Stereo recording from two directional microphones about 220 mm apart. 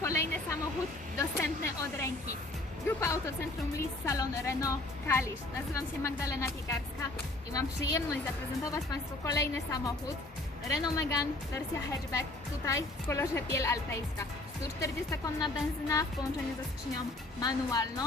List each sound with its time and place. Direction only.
0.0 s a sound: 15° left (ahead or behind)
1.4 s a woman's voice: 10° left (ahead or behind)
14.8 s a woman's voice: 15° left (ahead or behind)
17.4 s a woman's voice: 15° left (ahead or behind)